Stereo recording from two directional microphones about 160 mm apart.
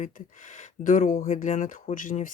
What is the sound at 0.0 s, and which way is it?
Speech, 50° left (ahead or behind).